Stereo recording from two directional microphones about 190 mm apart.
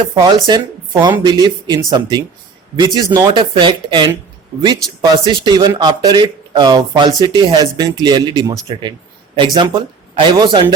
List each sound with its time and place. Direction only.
0.1 s speech: 20° right (ahead or behind)
5.2 s speech: 20° right (ahead or behind)